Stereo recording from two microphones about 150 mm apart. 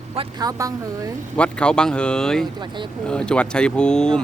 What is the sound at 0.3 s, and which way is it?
Speech, 25° right (ahead or behind).